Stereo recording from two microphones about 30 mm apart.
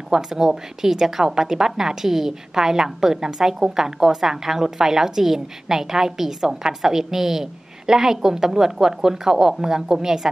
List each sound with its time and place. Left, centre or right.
0.1 s a woman's voice: centre